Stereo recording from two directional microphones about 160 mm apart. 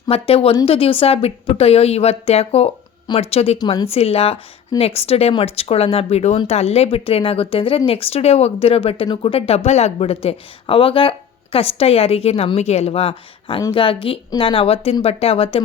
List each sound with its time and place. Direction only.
0.1 s a woman's voice: 35° left (ahead or behind)